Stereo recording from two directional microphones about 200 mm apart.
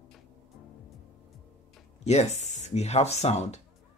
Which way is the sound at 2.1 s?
35° left (ahead or behind).